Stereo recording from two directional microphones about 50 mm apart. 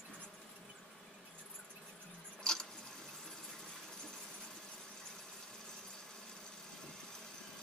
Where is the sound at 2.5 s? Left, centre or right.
Centre.